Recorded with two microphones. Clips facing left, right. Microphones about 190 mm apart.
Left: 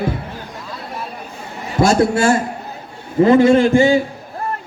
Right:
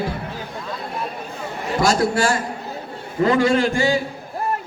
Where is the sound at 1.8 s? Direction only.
25° left (ahead or behind).